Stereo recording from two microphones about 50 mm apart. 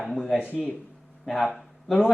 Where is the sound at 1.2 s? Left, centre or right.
Centre.